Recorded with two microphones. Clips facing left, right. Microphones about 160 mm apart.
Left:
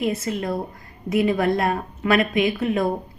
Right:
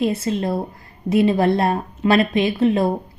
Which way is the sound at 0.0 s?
30° right (ahead or behind).